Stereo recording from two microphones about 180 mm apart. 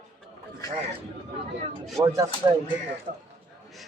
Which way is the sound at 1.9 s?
20° right (ahead or behind).